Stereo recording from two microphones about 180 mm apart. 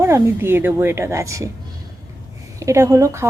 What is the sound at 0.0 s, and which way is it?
A woman's voice, 15° right (ahead or behind).